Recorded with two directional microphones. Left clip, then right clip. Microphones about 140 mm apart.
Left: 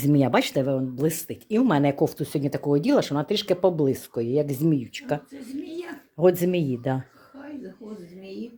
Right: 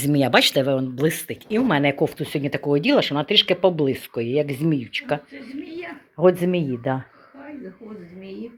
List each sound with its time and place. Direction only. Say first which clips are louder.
0.0 s speech: right 4 dB; 15° left (ahead or behind); by 1.4 s 5° right (ahead or behind)
1.5 s speech: right 2 dB; 15° left (ahead or behind)